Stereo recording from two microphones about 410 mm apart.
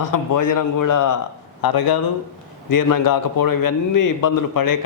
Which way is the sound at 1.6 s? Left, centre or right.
Left.